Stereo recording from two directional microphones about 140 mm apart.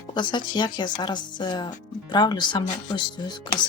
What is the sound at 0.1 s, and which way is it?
Speech, 35° left (ahead or behind).